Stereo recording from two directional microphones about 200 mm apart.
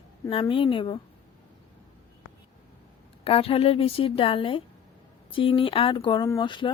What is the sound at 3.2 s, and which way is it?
A woman's voice, 30° left (ahead or behind).